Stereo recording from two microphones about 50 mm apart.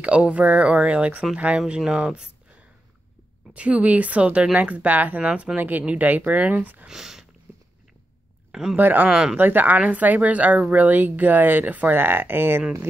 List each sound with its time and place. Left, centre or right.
0.3 s speech: right
2.1 s a sound: centre
3.5 s speech: right
5.6 s speech: right
6.9 s speech: centre
8.5 s speech: centre
8.7 s speech: right
9.1 s speech: centre
9.4 s speech: right
12.0 s speech: right